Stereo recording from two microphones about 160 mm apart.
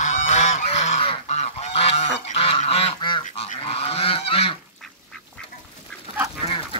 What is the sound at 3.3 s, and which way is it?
Goose, 50° left (ahead or behind).